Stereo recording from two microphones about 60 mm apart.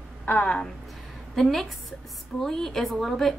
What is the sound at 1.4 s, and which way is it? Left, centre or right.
A woman's voice, centre.